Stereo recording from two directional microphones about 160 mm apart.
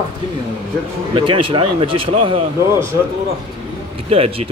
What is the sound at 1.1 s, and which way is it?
Speech, 30° right (ahead or behind).